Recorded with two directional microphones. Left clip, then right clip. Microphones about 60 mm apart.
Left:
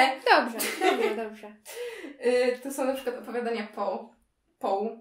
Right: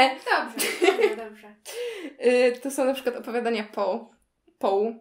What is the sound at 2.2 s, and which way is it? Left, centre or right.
Speech, right.